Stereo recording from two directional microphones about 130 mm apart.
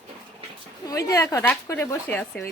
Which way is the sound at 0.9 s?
25° left (ahead or behind).